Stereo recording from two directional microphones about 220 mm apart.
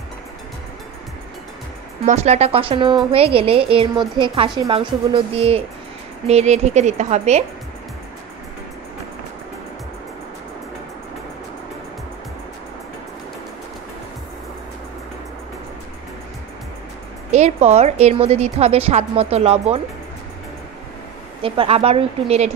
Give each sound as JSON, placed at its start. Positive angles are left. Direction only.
{"t": 2.0, "sound": "speech", "side_deg": -30}
{"t": 17.3, "sound": "speech", "side_deg": -30}
{"t": 21.4, "sound": "speech", "side_deg": -25}